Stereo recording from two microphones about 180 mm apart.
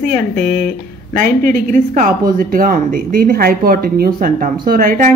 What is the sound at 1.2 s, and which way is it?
Speech, 50° right (ahead or behind).